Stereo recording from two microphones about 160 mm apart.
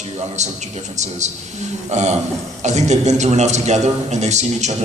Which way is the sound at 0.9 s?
45° right (ahead or behind).